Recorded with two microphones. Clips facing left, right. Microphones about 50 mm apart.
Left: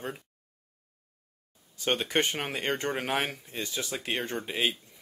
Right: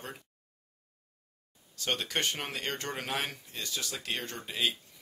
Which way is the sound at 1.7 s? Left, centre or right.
Left.